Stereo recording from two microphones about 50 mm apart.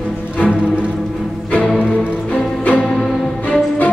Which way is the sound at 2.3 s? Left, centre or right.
Left.